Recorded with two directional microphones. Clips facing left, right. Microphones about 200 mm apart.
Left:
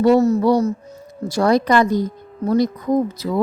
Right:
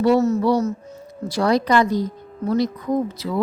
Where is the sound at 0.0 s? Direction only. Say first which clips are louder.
Left 3 dB; 40° left (ahead or behind).